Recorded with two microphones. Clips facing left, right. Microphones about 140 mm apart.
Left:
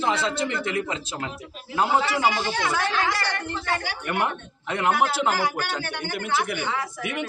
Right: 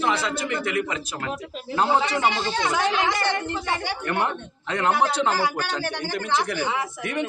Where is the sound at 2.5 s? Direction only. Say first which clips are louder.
Right 2 dB; 20° right (ahead or behind).